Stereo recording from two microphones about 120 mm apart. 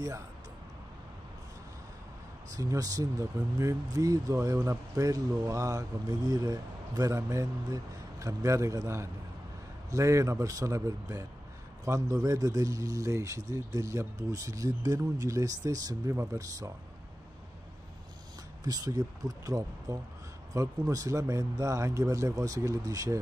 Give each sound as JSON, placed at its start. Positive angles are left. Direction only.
{"t": 2.5, "sound": "speech", "side_deg": -30}
{"t": 18.6, "sound": "speech", "side_deg": -30}